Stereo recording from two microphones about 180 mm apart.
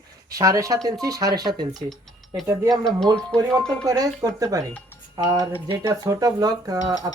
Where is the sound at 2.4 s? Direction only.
20° right (ahead or behind).